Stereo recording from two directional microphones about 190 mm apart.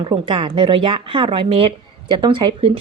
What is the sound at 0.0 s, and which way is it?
A woman's voice, 30° right (ahead or behind).